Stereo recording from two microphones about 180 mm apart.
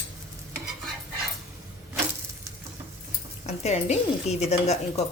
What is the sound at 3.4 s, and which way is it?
A woman's voice, 35° left (ahead or behind).